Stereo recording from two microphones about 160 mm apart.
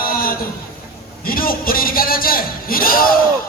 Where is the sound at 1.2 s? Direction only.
65° left (ahead or behind).